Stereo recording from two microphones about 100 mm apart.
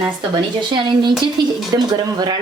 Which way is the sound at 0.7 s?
50° right (ahead or behind).